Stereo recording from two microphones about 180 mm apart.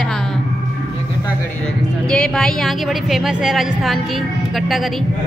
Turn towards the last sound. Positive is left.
turn(degrees=0)  # may be behind; listen again after turning